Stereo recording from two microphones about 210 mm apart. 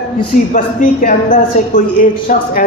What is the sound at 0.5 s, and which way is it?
A man's voice, 40° left (ahead or behind).